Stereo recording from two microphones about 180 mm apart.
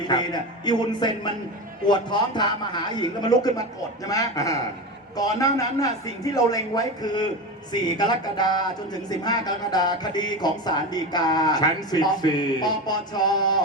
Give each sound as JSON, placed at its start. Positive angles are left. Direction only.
{"t": 0.1, "sound": "a man's voice", "side_deg": 25}